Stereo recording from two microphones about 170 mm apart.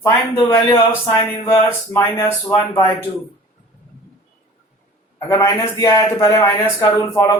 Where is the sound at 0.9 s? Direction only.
15° left (ahead or behind).